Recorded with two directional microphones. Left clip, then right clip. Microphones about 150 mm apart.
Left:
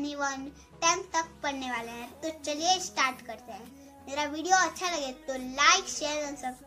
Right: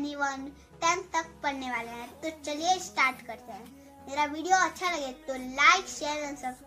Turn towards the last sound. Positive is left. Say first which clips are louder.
# even
turn(degrees=10)  # may be behind; listen again after turning